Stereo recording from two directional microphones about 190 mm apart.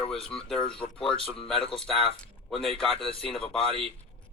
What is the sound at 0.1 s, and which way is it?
Speech, centre (ahead or behind).